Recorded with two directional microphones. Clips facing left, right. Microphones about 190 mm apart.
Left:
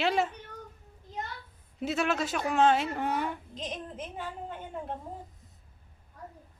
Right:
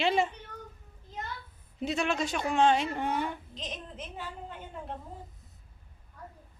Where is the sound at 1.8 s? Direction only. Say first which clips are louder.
Left 1 dB; 5° left (ahead or behind).